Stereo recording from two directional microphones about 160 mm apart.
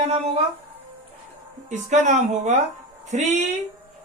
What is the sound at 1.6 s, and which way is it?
Speech, 50° right (ahead or behind).